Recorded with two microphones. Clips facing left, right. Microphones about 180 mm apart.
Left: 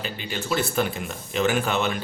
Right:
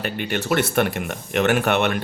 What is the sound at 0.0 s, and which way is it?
Speech, 65° right (ahead or behind).